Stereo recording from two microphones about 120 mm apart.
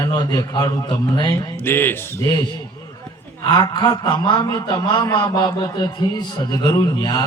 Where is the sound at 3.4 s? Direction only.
35° left (ahead or behind).